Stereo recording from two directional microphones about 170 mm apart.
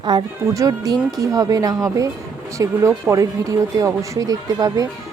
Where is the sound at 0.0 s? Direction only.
25° right (ahead or behind).